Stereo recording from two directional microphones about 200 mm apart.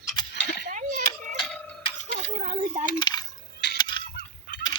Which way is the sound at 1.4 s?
5° left (ahead or behind).